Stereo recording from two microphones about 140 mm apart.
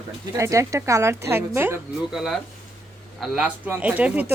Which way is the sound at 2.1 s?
Centre (ahead or behind).